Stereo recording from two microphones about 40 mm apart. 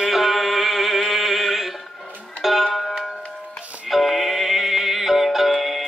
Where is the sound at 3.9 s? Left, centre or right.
Centre.